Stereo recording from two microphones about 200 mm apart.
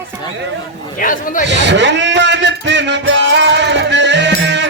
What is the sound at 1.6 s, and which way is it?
Music, 60° right (ahead or behind).